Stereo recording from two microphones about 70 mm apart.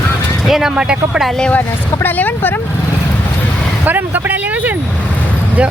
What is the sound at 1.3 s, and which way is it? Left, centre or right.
Speech, centre.